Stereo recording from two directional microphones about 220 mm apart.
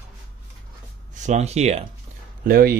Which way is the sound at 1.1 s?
30° right (ahead or behind).